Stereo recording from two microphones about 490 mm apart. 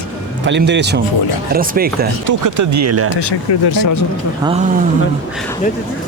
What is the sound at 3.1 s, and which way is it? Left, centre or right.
Speech, left.